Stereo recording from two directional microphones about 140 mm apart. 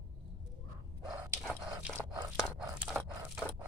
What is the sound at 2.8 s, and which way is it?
Dog, 15° right (ahead or behind).